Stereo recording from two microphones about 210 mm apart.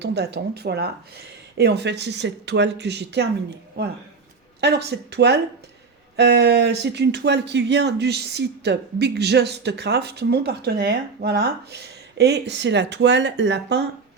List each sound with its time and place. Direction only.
0.0 s speech: 50° right (ahead or behind)